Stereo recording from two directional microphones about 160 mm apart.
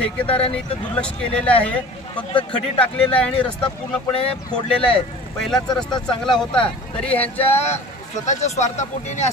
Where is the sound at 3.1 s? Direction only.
10° left (ahead or behind).